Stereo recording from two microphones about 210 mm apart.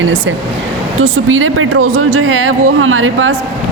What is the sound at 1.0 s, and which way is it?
Speech, 75° right (ahead or behind).